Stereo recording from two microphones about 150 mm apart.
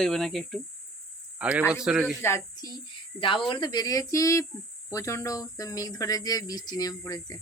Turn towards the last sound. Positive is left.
turn(degrees=25)  # may be behind; listen again after turning